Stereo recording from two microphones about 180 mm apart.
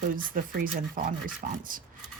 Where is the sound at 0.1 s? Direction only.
50° right (ahead or behind).